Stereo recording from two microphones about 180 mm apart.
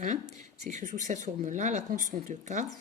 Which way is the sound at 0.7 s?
45° right (ahead or behind).